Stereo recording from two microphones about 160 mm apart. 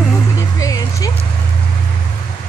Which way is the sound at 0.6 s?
20° left (ahead or behind).